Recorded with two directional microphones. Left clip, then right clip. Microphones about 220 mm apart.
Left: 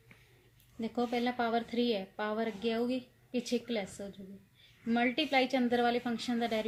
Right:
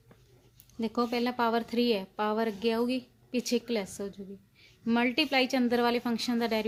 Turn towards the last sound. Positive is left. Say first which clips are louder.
# right 4 dB
turn(degrees=-50)  # may be behind; listen again after turning